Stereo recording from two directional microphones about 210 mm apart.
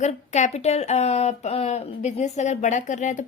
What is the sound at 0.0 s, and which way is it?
Speech, 35° left (ahead or behind).